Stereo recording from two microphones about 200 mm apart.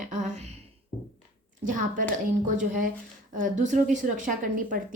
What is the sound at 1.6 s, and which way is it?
A woman's voice, 40° right (ahead or behind).